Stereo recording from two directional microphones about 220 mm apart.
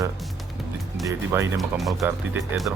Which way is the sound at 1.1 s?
15° right (ahead or behind).